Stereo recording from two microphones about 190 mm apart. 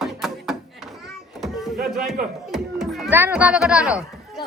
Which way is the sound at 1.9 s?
Centre (ahead or behind).